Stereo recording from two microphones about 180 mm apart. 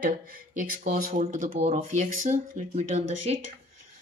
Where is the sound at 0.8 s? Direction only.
50° right (ahead or behind).